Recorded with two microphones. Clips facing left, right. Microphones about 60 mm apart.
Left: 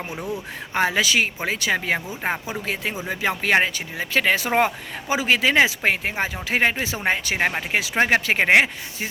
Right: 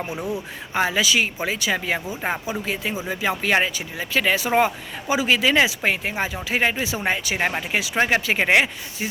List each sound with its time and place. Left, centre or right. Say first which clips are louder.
0.2 s speech: even; centre
0.7 s speech: even; left
2.2 s speech: even; left
3.1 s speech: left 1 dB; left